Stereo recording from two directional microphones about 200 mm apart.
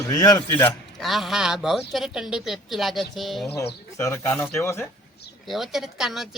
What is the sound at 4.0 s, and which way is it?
Speech, 15° left (ahead or behind).